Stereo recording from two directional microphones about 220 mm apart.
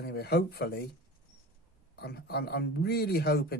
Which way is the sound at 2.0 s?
45° left (ahead or behind).